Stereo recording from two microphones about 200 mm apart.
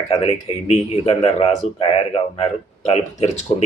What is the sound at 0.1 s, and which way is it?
Speech, 30° left (ahead or behind).